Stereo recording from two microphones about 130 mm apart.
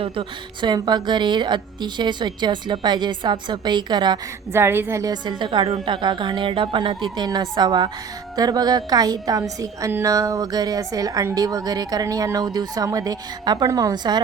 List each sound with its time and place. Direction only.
0.0 s a woman's voice: 40° right (ahead or behind)
4.5 s a woman's voice: 20° right (ahead or behind)
5.2 s a woman's voice: 35° right (ahead or behind)